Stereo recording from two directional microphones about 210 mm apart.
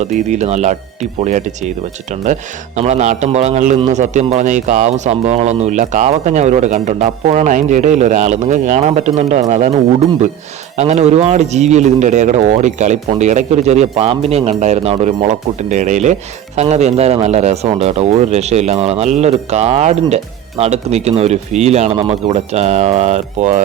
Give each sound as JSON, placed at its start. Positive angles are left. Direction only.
{"t": 0.0, "sound": "a man's voice", "side_deg": -35}
{"t": 10.8, "sound": "a man's voice", "side_deg": -30}